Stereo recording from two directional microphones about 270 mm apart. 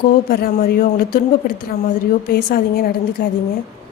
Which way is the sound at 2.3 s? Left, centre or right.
Left.